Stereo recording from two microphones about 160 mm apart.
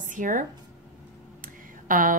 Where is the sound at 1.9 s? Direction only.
55° right (ahead or behind).